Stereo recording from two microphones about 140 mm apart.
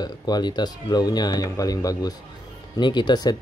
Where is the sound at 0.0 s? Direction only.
30° left (ahead or behind).